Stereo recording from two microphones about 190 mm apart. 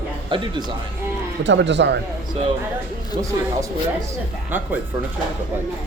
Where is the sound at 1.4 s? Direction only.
70° right (ahead or behind).